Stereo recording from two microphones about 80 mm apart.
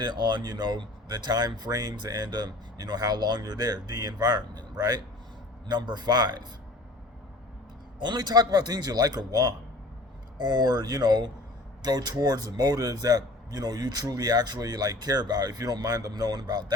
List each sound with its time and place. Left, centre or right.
0.0 s speech: right
8.0 s a man's voice: right